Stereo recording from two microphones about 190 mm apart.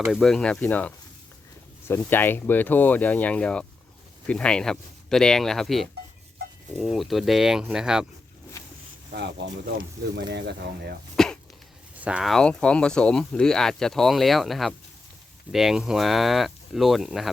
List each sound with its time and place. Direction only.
0.0 s speech: centre (ahead or behind)
9.1 s speech: 65° right (ahead or behind)
11.2 s a sound: centre (ahead or behind)
11.9 s speech: 5° right (ahead or behind)